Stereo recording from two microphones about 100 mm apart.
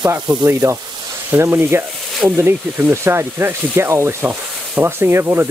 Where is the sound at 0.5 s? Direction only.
25° right (ahead or behind).